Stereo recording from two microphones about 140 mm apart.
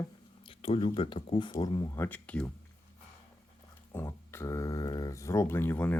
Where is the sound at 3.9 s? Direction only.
20° left (ahead or behind).